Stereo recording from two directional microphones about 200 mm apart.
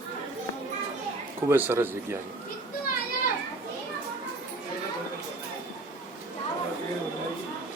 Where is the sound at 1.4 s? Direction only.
10° right (ahead or behind).